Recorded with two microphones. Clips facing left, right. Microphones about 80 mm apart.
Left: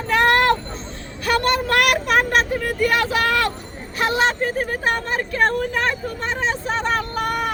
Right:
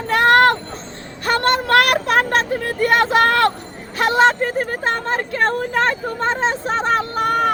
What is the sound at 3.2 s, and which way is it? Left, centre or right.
Speech, right.